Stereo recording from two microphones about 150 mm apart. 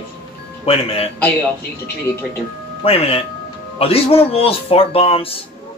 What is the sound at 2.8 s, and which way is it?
Speech, 40° left (ahead or behind).